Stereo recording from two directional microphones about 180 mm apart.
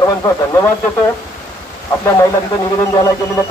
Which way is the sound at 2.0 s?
20° left (ahead or behind).